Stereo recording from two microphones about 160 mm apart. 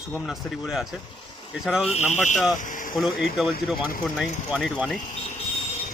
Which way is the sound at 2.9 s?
Centre (ahead or behind).